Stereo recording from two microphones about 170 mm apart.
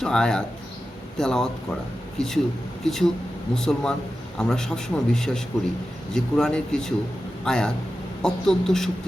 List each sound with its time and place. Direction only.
0.0 s a man's voice: 5° left (ahead or behind)